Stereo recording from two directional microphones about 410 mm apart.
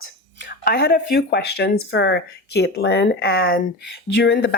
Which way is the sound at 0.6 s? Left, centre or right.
Left.